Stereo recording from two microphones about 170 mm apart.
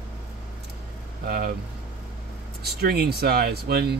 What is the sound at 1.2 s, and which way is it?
Speech, 65° right (ahead or behind).